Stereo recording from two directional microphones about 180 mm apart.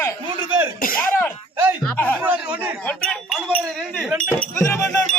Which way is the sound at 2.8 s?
5° left (ahead or behind).